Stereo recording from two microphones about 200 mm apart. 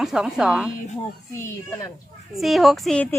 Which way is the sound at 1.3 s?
15° left (ahead or behind).